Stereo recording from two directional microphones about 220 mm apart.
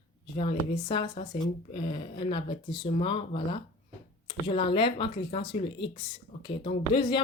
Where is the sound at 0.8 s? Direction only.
20° left (ahead or behind).